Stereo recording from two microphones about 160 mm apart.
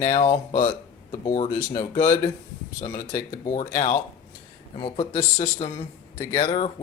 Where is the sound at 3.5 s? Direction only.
50° left (ahead or behind).